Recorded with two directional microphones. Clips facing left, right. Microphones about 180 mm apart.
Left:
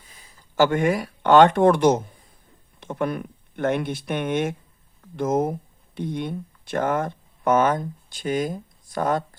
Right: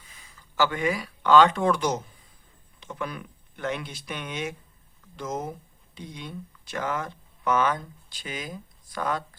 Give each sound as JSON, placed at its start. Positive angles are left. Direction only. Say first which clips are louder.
{"t": 0.1, "sound": "speech", "louder": "left 2 dB", "side_deg": 40}